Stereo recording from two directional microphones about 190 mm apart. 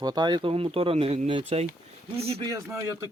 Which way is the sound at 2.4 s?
20° right (ahead or behind).